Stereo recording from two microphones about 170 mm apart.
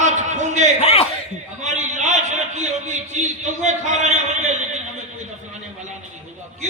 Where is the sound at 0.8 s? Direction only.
35° left (ahead or behind).